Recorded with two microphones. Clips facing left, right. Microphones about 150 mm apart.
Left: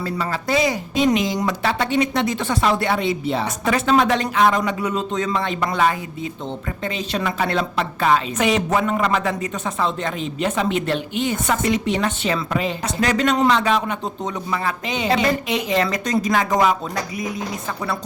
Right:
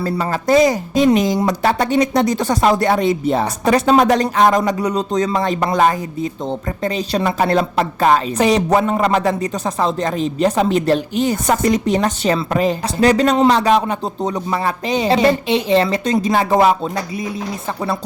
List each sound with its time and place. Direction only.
0.0 s a woman's voice: 45° right (ahead or behind)